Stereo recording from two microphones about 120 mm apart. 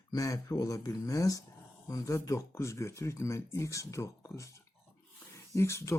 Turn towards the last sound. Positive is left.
turn(degrees=25)  # may be behind; listen again after turning